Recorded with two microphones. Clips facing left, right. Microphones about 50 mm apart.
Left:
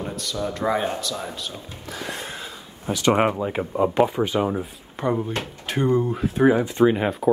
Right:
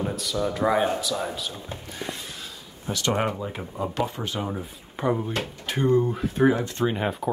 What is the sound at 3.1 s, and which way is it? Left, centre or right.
Speech, left.